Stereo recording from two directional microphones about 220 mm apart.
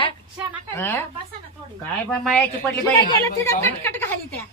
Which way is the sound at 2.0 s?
5° left (ahead or behind).